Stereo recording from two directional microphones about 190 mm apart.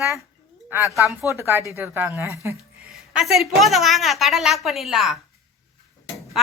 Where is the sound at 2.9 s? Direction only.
5° right (ahead or behind).